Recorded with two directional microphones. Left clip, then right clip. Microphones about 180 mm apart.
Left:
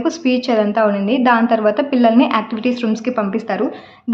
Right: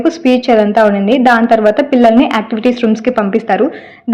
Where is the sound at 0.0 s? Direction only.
20° right (ahead or behind).